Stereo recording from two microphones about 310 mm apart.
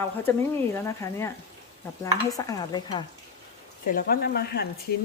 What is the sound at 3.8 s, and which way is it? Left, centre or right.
Speech, left.